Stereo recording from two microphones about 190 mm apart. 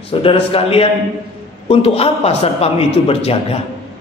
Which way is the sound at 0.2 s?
30° left (ahead or behind).